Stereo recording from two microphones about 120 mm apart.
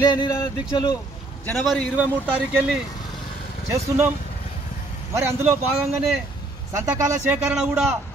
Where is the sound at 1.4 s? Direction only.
10° left (ahead or behind).